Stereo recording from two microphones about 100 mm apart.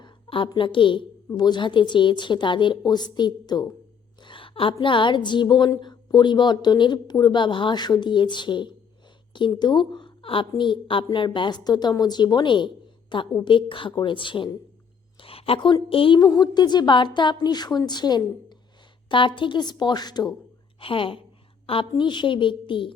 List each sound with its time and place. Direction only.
0.0 s a woman's voice: 55° left (ahead or behind)
1.3 s a woman's voice: 45° left (ahead or behind)
4.2 s a woman's voice: 55° left (ahead or behind)
15.2 s a woman's voice: 70° left (ahead or behind)
16.2 s a woman's voice: 45° left (ahead or behind)
19.0 s a woman's voice: 55° left (ahead or behind)
20.7 s a woman's voice: 65° left (ahead or behind)